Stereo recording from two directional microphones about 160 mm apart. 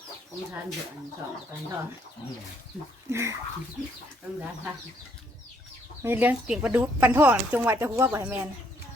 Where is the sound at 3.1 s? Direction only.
15° right (ahead or behind).